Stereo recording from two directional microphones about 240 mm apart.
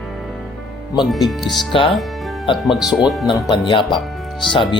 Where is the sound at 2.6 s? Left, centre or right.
Centre.